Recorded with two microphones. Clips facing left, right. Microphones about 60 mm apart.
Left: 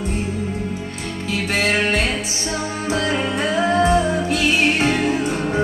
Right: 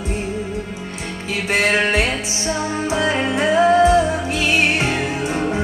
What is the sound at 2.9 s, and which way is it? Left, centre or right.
Music, right.